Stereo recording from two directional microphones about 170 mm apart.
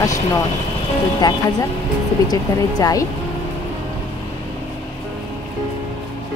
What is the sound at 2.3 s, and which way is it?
Speech, 20° left (ahead or behind).